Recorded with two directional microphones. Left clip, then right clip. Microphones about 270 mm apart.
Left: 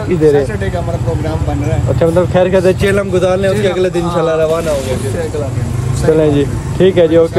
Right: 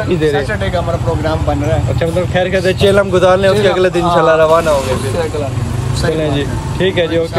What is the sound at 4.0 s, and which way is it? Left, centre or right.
Speech, right.